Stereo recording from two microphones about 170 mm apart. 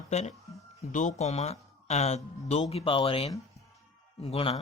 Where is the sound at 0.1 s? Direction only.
40° left (ahead or behind).